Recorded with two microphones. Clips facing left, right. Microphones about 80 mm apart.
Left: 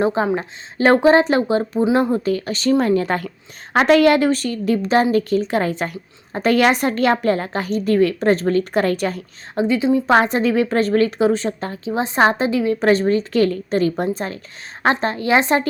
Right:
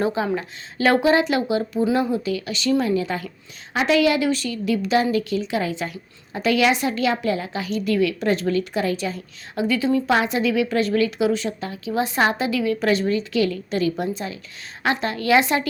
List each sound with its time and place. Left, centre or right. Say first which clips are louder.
0.0 s a woman's voice: left 4 dB; left
9.6 s a woman's voice: left 3 dB; left
10.1 s a woman's voice: left 4 dB; left